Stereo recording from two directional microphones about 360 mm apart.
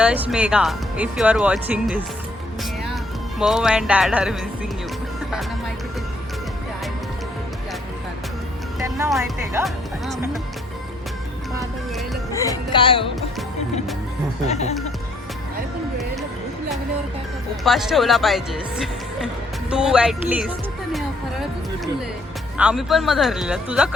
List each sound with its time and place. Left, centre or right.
0.0 s speech: centre
8.8 s speech: centre
12.3 s speech: centre
14.4 s speech: centre
17.6 s speech: centre
22.5 s speech: centre